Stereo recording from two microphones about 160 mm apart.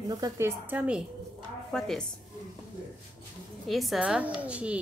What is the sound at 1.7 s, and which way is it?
Speech, centre (ahead or behind).